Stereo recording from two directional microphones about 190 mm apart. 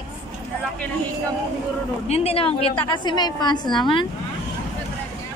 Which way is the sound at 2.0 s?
35° left (ahead or behind).